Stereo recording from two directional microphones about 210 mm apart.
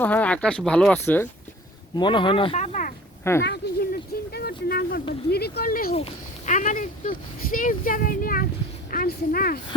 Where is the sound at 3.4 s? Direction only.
50° left (ahead or behind).